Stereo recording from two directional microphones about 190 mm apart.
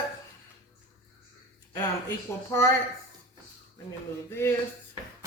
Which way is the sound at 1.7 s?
15° left (ahead or behind).